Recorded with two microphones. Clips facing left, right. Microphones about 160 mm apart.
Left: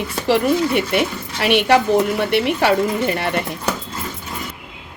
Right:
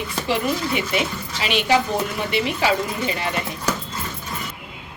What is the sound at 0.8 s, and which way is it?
A woman's voice, 60° left (ahead or behind).